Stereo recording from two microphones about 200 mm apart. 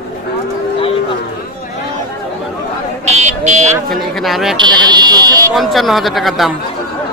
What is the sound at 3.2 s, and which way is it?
Vehicle, 35° right (ahead or behind).